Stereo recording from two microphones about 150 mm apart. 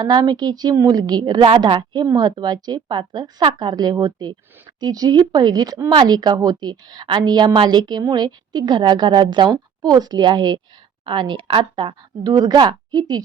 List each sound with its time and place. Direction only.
0.0 s speech: 25° right (ahead or behind)